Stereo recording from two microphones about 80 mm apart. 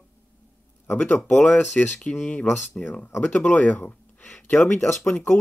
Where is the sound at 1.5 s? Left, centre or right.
Left.